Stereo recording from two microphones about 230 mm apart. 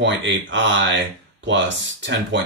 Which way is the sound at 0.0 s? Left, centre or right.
Right.